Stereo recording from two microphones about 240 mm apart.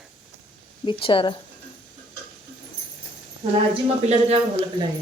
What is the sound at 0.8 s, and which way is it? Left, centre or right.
Speech, left.